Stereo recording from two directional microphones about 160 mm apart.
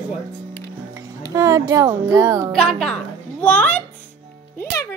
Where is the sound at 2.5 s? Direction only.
5° left (ahead or behind).